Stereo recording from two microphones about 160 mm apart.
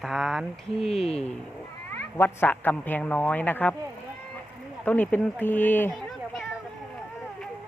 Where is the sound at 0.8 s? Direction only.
40° left (ahead or behind).